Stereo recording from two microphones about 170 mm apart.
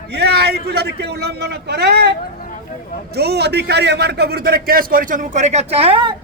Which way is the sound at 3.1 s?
70° right (ahead or behind).